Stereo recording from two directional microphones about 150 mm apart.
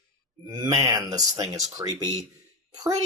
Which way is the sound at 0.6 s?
25° right (ahead or behind).